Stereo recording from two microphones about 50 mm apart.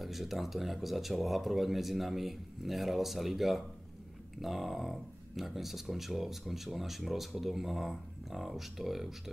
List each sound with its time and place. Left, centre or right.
0.0 s speech: centre